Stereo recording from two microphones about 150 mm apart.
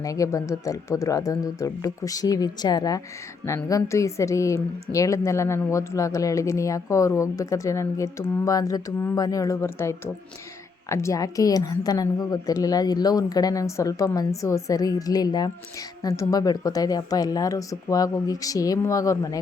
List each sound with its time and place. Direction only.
0.0 s speech: 20° left (ahead or behind)